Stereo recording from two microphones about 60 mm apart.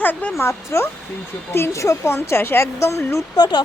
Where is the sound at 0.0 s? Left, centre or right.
Left.